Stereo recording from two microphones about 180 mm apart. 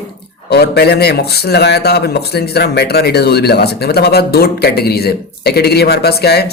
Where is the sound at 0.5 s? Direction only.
65° left (ahead or behind).